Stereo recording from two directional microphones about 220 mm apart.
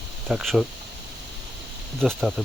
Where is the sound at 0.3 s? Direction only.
Centre (ahead or behind).